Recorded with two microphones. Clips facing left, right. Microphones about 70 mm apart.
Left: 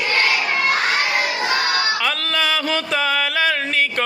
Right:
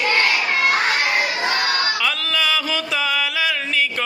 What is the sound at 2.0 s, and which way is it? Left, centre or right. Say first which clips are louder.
Music: left 1 dB; left.